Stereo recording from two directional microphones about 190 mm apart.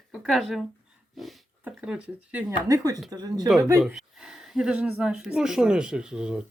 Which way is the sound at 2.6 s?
20° right (ahead or behind).